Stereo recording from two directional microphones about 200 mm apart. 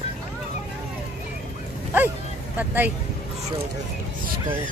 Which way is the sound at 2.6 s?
10° right (ahead or behind).